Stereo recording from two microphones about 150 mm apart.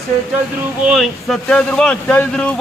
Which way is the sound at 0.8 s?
Centre (ahead or behind).